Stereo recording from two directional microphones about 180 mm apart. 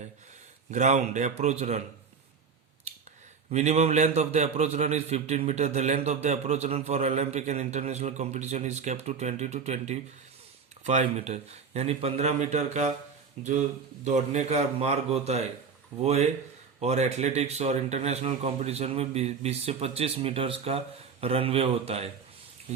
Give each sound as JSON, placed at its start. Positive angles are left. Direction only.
{"t": 0.7, "sound": "speech", "side_deg": -40}
{"t": 3.5, "sound": "speech", "side_deg": -40}